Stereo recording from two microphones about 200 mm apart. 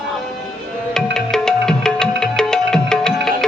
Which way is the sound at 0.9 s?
5° left (ahead or behind).